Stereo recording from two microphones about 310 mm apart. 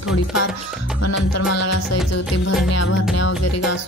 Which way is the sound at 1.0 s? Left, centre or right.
Left.